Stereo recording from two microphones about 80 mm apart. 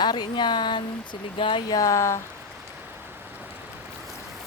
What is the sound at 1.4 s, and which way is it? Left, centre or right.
Speech, left.